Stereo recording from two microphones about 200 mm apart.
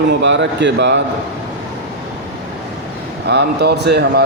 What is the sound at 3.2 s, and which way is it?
Speech, 55° right (ahead or behind).